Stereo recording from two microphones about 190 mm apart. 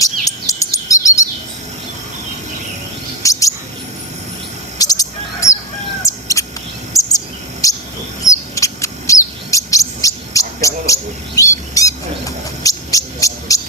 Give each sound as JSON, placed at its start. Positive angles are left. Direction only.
{"t": 0.0, "sound": "chirp", "side_deg": 15}
{"t": 3.2, "sound": "cricket", "side_deg": 15}
{"t": 4.8, "sound": "chirp", "side_deg": 20}
{"t": 6.4, "sound": "bird", "side_deg": 15}
{"t": 6.9, "sound": "bird vocalization", "side_deg": 20}
{"t": 7.6, "sound": "bird", "side_deg": 20}
{"t": 8.2, "sound": "chirp", "side_deg": 15}
{"t": 12.6, "sound": "a sound", "side_deg": 15}